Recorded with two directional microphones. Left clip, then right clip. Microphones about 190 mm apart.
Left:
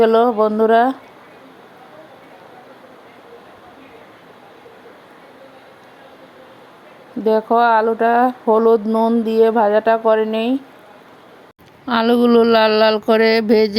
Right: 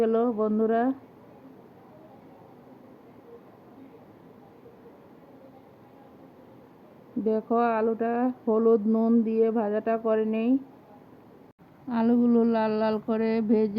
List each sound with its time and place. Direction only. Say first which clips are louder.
0.0 s speech: left 12 dB; 25° left (ahead or behind)
7.3 s speech: left 12 dB; 20° left (ahead or behind)
11.9 s a sound: left 11 dB; 50° left (ahead or behind)